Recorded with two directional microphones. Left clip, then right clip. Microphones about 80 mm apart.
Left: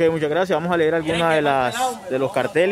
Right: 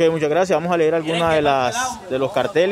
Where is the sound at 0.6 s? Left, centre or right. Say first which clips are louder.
Right 1 dB; centre.